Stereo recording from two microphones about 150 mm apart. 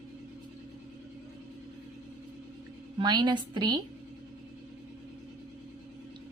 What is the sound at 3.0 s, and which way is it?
Speech, 30° right (ahead or behind).